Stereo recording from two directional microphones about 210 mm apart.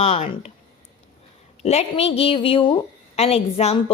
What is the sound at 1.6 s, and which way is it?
A woman's voice, 30° left (ahead or behind).